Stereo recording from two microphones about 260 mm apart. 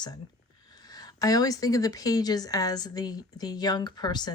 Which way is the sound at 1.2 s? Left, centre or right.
Centre.